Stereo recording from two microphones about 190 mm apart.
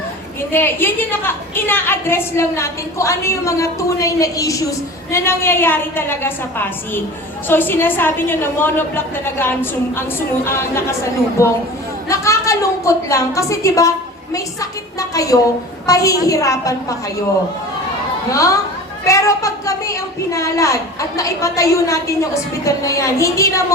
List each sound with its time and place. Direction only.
0.5 s a woman's voice: 10° left (ahead or behind)
11.4 s a woman's voice: 15° left (ahead or behind)
18.3 s a woman's voice: 15° left (ahead or behind)